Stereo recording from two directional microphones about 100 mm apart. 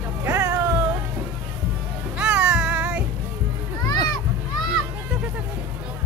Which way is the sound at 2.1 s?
10° right (ahead or behind).